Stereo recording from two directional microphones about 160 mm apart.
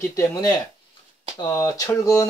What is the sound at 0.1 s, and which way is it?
Speech, 20° left (ahead or behind).